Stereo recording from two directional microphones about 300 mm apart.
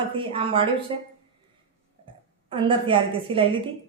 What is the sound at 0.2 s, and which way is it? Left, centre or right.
Speech, centre.